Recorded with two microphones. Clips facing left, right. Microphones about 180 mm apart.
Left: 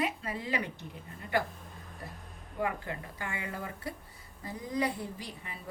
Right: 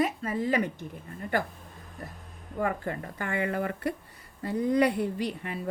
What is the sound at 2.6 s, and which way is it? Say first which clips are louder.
Speech: right 4 dB; 50° right (ahead or behind).